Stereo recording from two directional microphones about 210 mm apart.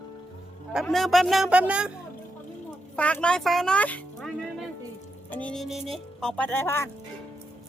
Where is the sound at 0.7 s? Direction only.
Centre (ahead or behind).